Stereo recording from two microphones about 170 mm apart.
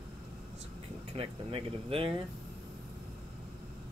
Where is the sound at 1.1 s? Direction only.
35° right (ahead or behind).